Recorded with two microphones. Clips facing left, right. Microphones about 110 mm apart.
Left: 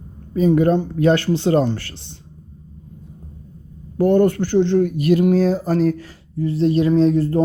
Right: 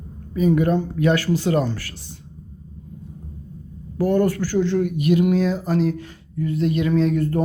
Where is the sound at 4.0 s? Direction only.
25° left (ahead or behind).